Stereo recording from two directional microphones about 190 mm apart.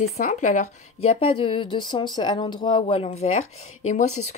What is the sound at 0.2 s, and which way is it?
Speech, 40° left (ahead or behind).